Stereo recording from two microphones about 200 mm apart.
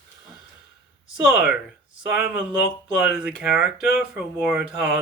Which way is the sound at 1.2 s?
Centre (ahead or behind).